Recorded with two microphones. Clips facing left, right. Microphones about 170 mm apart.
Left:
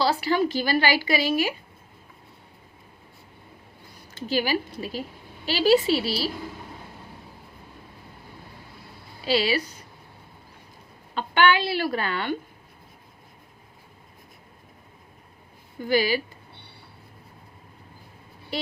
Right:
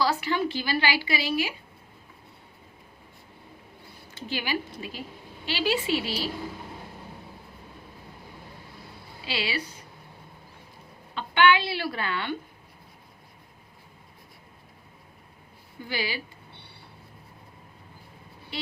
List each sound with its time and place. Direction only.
0.0 s a woman's voice: 30° left (ahead or behind)
4.3 s a woman's voice: 40° left (ahead or behind)
9.2 s a woman's voice: 40° left (ahead or behind)
11.1 s a woman's voice: 40° left (ahead or behind)
15.8 s a woman's voice: 45° left (ahead or behind)